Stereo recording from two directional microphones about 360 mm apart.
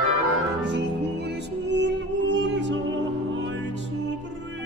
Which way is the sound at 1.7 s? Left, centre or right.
Right.